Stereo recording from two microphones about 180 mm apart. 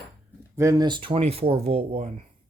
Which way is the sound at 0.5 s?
15° right (ahead or behind).